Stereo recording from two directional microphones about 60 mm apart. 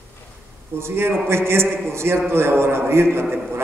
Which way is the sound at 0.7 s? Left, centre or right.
Right.